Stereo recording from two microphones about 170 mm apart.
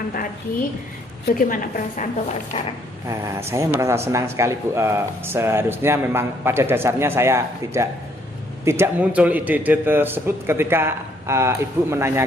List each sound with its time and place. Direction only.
1.4 s a woman's voice: 55° left (ahead or behind)
3.1 s a man's voice: 15° right (ahead or behind)